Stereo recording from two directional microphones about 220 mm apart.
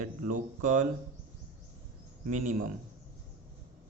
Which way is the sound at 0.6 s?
35° right (ahead or behind).